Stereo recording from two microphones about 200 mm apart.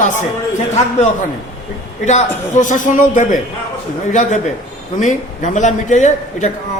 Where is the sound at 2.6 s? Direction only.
40° left (ahead or behind).